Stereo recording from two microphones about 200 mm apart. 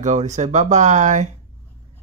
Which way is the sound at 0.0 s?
35° right (ahead or behind).